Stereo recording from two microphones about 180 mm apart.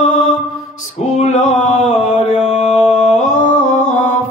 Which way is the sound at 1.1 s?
40° left (ahead or behind).